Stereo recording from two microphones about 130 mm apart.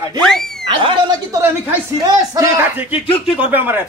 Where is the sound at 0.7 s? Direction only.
40° right (ahead or behind).